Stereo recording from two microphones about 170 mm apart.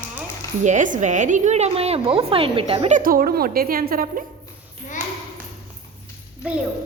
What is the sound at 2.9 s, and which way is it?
A woman's voice, 55° right (ahead or behind).